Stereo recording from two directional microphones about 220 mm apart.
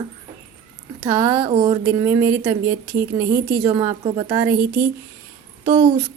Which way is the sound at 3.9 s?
25° right (ahead or behind).